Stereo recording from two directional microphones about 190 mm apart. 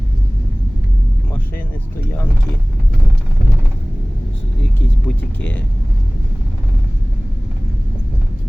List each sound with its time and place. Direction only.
5.0 s speech: 10° left (ahead or behind)